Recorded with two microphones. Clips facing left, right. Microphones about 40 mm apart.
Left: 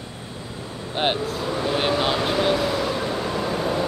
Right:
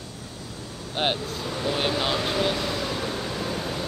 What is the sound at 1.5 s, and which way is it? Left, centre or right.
Vehicle, centre.